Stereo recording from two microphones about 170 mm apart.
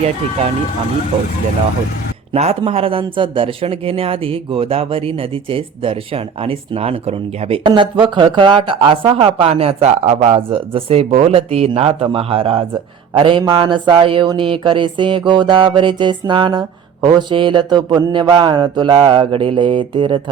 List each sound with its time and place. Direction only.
2.3 s speech: 35° right (ahead or behind)
13.1 s mantra: 30° right (ahead or behind)